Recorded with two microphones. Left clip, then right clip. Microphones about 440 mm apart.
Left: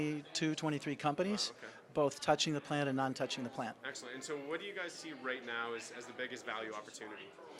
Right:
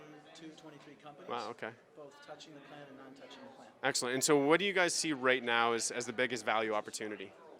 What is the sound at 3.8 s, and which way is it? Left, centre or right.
Speech, right.